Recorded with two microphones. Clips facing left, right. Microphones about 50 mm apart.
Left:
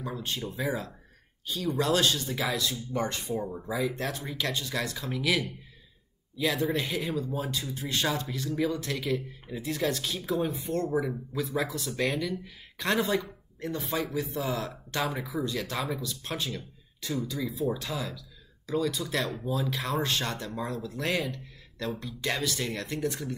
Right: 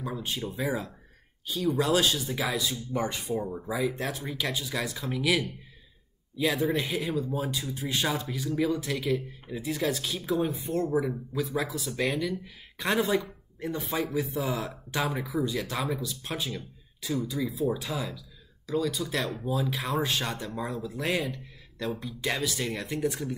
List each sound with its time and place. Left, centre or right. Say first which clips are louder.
0.2 s speech: even; centre